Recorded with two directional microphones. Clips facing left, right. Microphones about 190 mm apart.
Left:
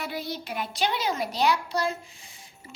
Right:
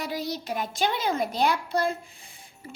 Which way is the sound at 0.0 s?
40° right (ahead or behind).